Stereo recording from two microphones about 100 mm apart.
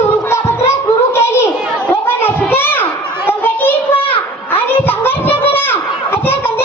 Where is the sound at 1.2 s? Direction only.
25° left (ahead or behind).